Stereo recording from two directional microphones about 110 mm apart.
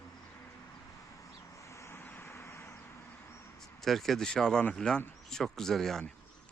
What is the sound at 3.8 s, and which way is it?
Speech, centre (ahead or behind).